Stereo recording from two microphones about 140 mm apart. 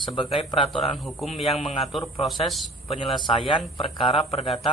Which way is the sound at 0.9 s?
Centre (ahead or behind).